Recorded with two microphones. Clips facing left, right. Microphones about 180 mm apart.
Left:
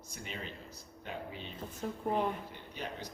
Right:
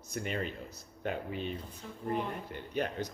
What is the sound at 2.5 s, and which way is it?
Speech, 55° right (ahead or behind).